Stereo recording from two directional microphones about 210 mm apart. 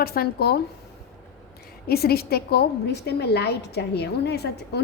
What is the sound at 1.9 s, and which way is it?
A woman's voice, 50° left (ahead or behind).